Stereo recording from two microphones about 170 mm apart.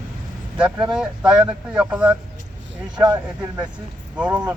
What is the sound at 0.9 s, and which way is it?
Speech, 5° right (ahead or behind).